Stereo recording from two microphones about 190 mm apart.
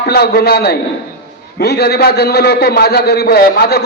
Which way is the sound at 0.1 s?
55° left (ahead or behind).